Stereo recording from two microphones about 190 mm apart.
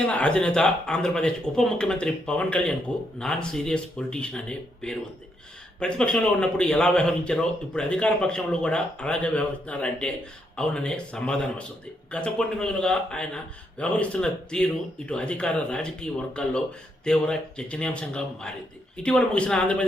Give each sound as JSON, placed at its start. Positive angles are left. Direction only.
{"t": 0.0, "sound": "a man's voice", "side_deg": 5}